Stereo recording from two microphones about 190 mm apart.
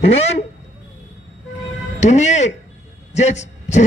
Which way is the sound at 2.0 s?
35° left (ahead or behind).